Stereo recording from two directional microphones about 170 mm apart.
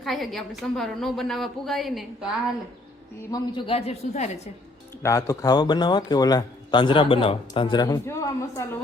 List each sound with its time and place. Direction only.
0.0 s a woman's voice: centre (ahead or behind)
3.3 s a man's voice: 30° left (ahead or behind)
5.0 s a man's voice: 15° left (ahead or behind)